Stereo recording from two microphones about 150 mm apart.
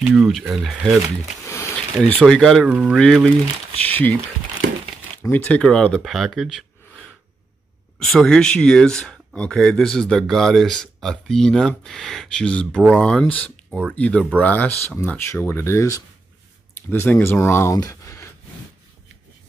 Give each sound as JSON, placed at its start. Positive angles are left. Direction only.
{"t": 0.0, "sound": "speech", "side_deg": -5}
{"t": 1.4, "sound": "a sound", "side_deg": 20}
{"t": 2.1, "sound": "speech", "side_deg": 5}
{"t": 2.7, "sound": "speech", "side_deg": -10}
{"t": 5.2, "sound": "speech", "side_deg": 10}
{"t": 8.0, "sound": "speech", "side_deg": 5}
{"t": 13.7, "sound": "speech", "side_deg": -5}
{"t": 13.9, "sound": "speech", "side_deg": 10}